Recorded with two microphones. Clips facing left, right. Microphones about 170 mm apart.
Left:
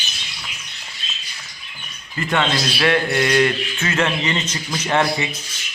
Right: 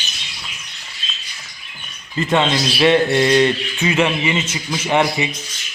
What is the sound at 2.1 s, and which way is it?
Speech, 20° right (ahead or behind).